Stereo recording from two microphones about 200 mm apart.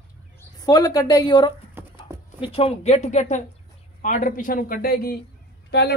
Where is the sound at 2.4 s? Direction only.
30° left (ahead or behind); by 5.9 s 55° left (ahead or behind).